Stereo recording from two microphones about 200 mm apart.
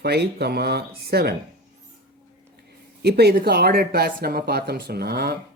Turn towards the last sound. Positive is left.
turn(degrees=-50)  # may be behind; listen again after turning